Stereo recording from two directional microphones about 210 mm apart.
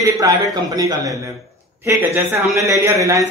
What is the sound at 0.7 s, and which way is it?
Speech, 15° right (ahead or behind).